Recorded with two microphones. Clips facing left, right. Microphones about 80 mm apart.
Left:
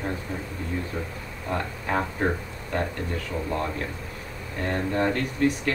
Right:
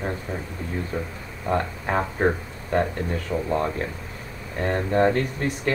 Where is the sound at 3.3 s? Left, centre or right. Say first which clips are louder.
Right 6 dB; centre.